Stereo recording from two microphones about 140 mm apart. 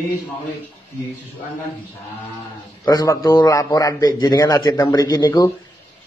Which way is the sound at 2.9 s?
30° left (ahead or behind).